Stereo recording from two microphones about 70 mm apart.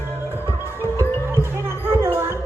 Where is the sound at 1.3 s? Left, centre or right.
Right.